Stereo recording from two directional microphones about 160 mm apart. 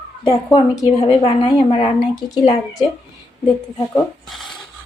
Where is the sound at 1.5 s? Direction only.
35° left (ahead or behind).